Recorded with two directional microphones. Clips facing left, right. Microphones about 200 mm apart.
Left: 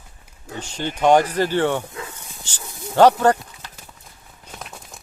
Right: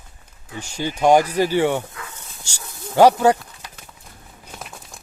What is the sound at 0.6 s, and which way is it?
Speech, 10° right (ahead or behind).